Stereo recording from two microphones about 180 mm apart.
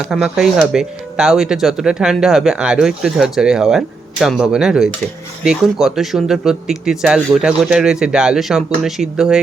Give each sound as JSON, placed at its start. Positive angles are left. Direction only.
{"t": 0.1, "sound": "speech", "side_deg": 0}